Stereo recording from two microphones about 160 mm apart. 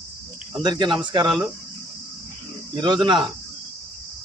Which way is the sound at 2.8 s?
30° right (ahead or behind).